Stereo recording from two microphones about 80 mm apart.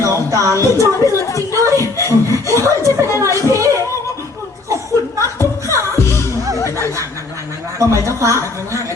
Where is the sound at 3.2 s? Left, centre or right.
Right.